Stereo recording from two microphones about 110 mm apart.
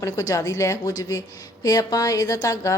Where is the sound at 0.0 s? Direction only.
30° left (ahead or behind).